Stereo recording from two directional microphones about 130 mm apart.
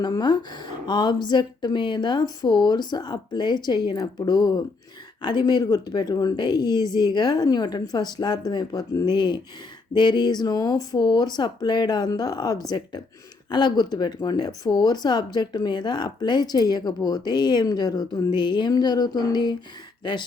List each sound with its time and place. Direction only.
0.0 s speech: 35° left (ahead or behind)